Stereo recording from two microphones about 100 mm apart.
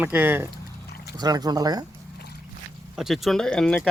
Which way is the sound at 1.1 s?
40° right (ahead or behind).